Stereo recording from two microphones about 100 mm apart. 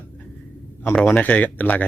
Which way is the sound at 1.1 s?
15° left (ahead or behind).